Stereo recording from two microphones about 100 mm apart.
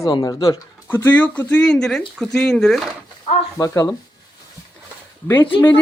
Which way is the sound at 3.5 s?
30° left (ahead or behind).